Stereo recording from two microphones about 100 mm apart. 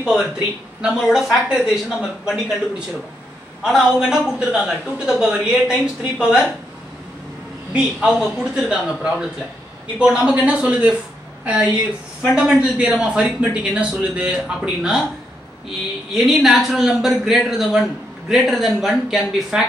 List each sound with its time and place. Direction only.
0.0 s speech: 5° right (ahead or behind)
3.6 s a man's voice: 5° right (ahead or behind)
7.7 s a man's voice: 5° right (ahead or behind)
12.2 s a man's voice: 10° right (ahead or behind)
16.2 s speech: centre (ahead or behind)